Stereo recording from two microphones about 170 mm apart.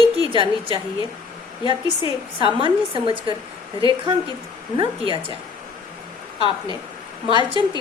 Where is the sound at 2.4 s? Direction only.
30° right (ahead or behind).